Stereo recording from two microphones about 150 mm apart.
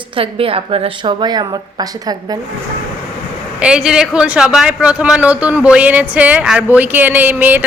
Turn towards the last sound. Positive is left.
turn(degrees=-10)  # may be behind; listen again after turning